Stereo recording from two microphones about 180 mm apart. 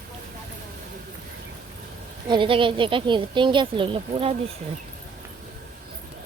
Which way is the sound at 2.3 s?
30° right (ahead or behind).